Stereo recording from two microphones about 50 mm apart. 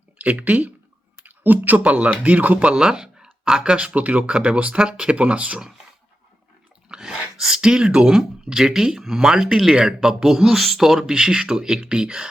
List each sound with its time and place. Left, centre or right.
0.2 s speech: right
6.8 s speech: centre
11.0 s speech: centre